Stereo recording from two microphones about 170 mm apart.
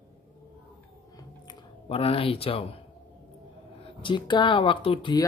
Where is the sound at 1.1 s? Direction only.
30° left (ahead or behind).